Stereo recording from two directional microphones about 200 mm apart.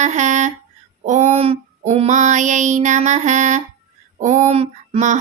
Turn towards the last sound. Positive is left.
turn(degrees=-35)  # may be behind; listen again after turning